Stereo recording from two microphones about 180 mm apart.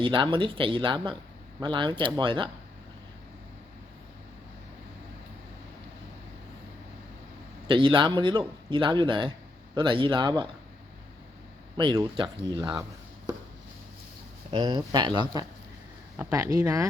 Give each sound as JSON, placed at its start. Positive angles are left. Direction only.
{"t": 0.0, "sound": "speech", "side_deg": -30}
{"t": 7.7, "sound": "speech", "side_deg": -30}
{"t": 11.8, "sound": "speech", "side_deg": -25}
{"t": 14.5, "sound": "speech", "side_deg": -20}